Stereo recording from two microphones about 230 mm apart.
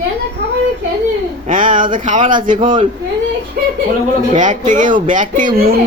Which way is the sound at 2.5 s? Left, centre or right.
Right.